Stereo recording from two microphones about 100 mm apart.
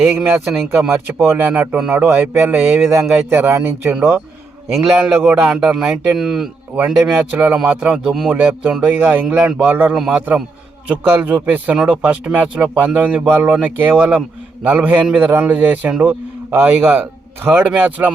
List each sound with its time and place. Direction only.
0.0 s speech: centre (ahead or behind)
0.9 s speech: 25° right (ahead or behind)
4.7 s speech: 10° right (ahead or behind)
7.9 s speech: centre (ahead or behind)
8.8 s speech: 15° right (ahead or behind)
10.0 s speech: 5° right (ahead or behind)
11.0 s speech: 15° right (ahead or behind)